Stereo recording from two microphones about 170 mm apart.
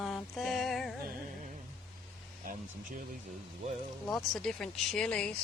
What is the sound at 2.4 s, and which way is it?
Speech, 50° right (ahead or behind).